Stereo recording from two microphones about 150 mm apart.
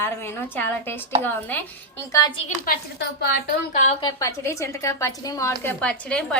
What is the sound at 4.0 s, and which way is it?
A woman's voice, 25° left (ahead or behind).